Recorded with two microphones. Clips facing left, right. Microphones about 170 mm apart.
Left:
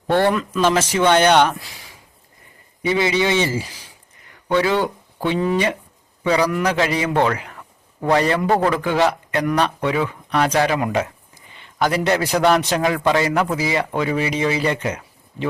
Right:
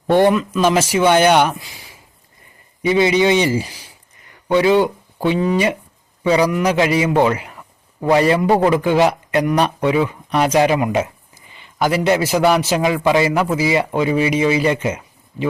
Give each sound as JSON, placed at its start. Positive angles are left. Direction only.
{"t": 0.1, "sound": "a man's voice", "side_deg": -15}
{"t": 2.8, "sound": "a man's voice", "side_deg": -20}
{"t": 10.8, "sound": "a man's voice", "side_deg": -5}